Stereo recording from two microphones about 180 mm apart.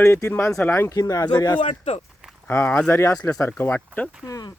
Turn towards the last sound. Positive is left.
turn(degrees=20)  # may be behind; listen again after turning